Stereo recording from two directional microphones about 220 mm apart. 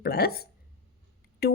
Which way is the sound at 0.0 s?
45° left (ahead or behind).